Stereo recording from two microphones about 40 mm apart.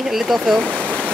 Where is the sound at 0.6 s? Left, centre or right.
Centre.